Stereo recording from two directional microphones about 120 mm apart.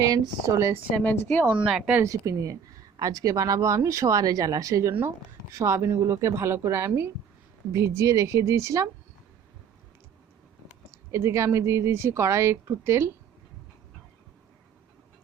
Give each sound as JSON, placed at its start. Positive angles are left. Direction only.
{"t": 0.0, "sound": "speech", "side_deg": -30}
{"t": 0.9, "sound": "a woman's voice", "side_deg": 15}
{"t": 1.6, "sound": "speech", "side_deg": -5}
{"t": 2.0, "sound": "speech", "side_deg": -25}
{"t": 10.7, "sound": "speech", "side_deg": -20}